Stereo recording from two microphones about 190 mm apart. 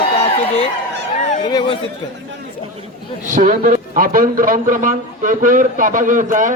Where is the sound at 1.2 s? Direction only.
40° left (ahead or behind).